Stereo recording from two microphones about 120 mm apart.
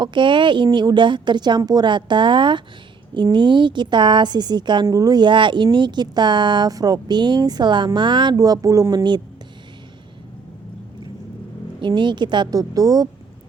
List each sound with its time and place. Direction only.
0.0 s a woman's voice: 40° right (ahead or behind)
11.8 s a woman's voice: 40° right (ahead or behind)